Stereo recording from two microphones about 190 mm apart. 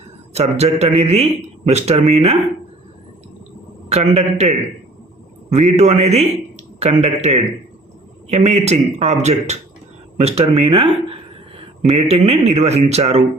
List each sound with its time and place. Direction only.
0.3 s a man's voice: 35° right (ahead or behind)
3.8 s a man's voice: 35° right (ahead or behind)